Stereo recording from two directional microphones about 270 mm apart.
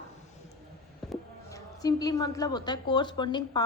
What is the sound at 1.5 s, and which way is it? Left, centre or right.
A woman's voice, centre.